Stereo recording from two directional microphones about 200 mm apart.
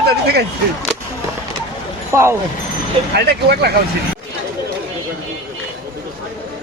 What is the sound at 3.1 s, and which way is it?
Speech, 55° right (ahead or behind).